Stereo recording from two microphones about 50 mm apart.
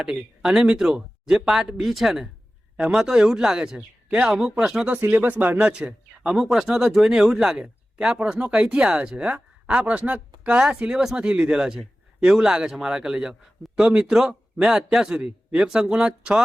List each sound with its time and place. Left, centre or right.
0.0 s speech: centre
4.9 s speech: right
5.6 s speech: right
6.1 s speech: centre
15.1 s speech: right